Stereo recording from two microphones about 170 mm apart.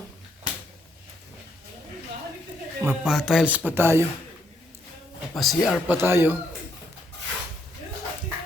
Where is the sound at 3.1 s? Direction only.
Centre (ahead or behind).